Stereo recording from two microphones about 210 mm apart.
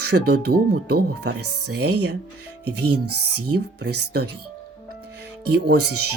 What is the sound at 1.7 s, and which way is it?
Speech, 50° right (ahead or behind).